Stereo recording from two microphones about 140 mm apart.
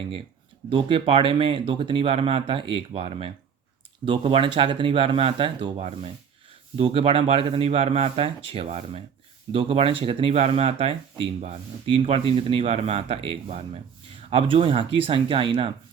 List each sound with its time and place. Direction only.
0.7 s speech: 40° right (ahead or behind)